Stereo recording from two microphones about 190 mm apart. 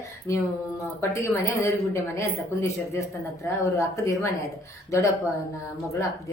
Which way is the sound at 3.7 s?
15° left (ahead or behind).